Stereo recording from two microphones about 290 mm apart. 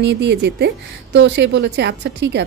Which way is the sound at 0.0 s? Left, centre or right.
Right.